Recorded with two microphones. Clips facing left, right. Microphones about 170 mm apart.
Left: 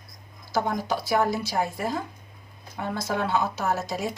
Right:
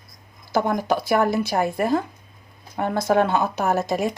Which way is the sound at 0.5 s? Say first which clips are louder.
Right 5 dB; 55° right (ahead or behind).